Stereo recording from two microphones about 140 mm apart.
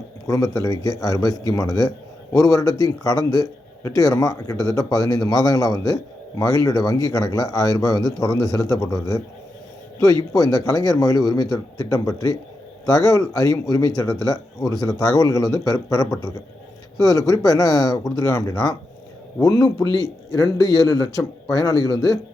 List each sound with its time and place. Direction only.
0.3 s speech: 25° left (ahead or behind)